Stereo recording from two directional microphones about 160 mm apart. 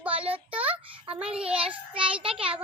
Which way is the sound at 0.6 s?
35° right (ahead or behind).